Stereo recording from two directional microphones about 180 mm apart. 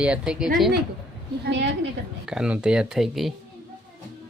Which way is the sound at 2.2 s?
5° right (ahead or behind).